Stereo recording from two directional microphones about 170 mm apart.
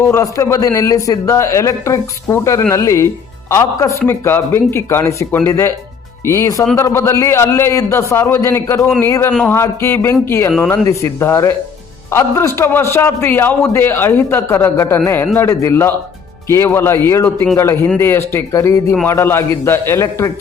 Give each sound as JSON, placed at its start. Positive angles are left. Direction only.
{"t": 0.1, "sound": "a man's voice", "side_deg": 15}